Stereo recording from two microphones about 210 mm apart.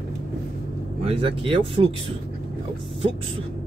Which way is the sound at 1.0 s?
25° right (ahead or behind).